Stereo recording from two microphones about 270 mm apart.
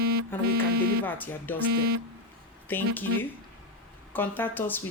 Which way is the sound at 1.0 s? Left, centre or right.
Centre.